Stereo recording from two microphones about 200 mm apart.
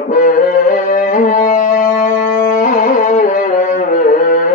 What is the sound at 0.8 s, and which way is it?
Music, 40° left (ahead or behind).